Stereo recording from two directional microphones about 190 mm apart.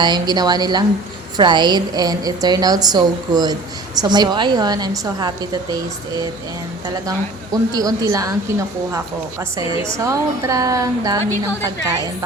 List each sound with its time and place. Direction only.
0.0 s a woman's voice: 20° right (ahead or behind)
7.5 s a woman's voice: 20° right (ahead or behind)
9.6 s a woman's voice: 15° right (ahead or behind)